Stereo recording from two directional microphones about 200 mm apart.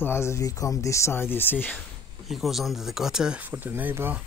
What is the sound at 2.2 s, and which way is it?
Speech, centre (ahead or behind).